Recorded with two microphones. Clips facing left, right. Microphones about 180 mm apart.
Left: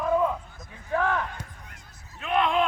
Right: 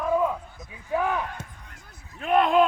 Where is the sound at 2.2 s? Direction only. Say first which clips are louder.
Right 4 dB; 40° right (ahead or behind).